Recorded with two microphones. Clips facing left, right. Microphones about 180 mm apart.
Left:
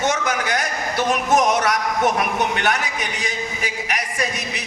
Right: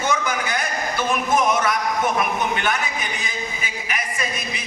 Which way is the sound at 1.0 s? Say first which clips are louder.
Left 3 dB; 80° left.